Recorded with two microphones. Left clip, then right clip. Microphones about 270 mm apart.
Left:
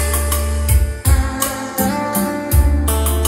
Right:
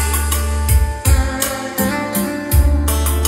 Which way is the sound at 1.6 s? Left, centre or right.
Centre.